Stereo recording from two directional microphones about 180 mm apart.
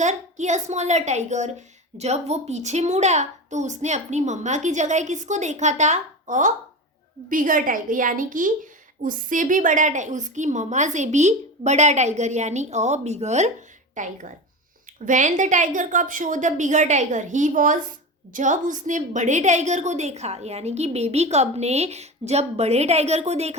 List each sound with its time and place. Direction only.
0.0 s a woman's voice: 40° right (ahead or behind)